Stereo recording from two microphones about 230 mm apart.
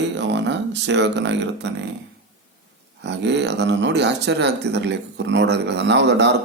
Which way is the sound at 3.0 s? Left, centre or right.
Right.